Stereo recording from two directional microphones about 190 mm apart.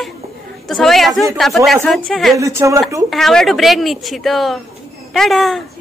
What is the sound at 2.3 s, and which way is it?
Speech, 15° right (ahead or behind).